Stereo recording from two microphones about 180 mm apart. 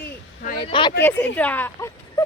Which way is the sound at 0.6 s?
30° left (ahead or behind).